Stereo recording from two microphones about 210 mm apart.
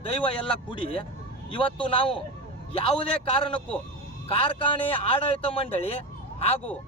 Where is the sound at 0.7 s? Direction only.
25° left (ahead or behind).